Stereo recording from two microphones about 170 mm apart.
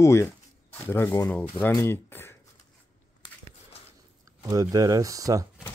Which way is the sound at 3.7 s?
35° left (ahead or behind).